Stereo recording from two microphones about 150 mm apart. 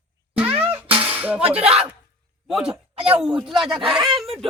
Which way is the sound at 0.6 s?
10° right (ahead or behind).